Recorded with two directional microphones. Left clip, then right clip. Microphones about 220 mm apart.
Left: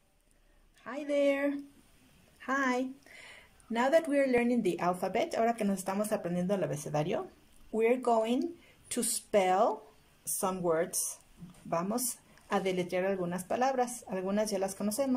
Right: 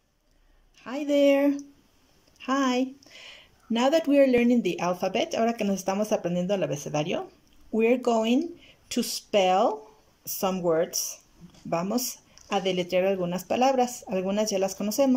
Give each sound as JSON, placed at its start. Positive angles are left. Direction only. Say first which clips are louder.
{"t": 0.7, "sound": "speech", "louder": "right 7 dB", "side_deg": -10}